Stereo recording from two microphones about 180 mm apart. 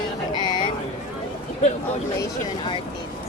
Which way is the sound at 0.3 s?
25° left (ahead or behind).